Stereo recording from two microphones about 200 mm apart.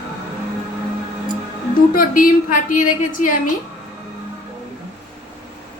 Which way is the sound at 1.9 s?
45° left (ahead or behind).